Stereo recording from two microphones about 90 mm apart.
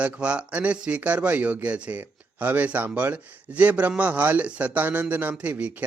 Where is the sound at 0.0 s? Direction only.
15° right (ahead or behind).